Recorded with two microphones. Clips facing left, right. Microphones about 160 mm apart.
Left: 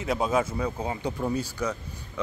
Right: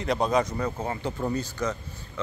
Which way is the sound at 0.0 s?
5° left (ahead or behind).